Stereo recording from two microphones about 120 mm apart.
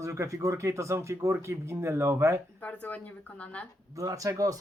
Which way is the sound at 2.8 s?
15° left (ahead or behind).